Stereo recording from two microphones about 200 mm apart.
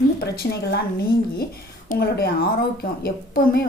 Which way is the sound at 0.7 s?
50° left (ahead or behind).